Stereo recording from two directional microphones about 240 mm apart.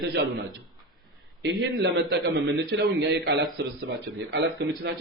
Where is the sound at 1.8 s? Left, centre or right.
Right.